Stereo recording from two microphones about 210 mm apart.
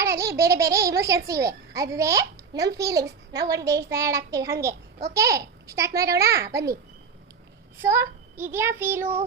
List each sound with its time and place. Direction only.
0.0 s a child's voice: 15° right (ahead or behind)
7.8 s a child's voice: 10° right (ahead or behind)